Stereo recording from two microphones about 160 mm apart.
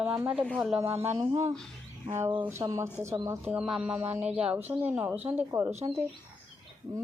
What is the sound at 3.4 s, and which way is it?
Speech, 10° right (ahead or behind).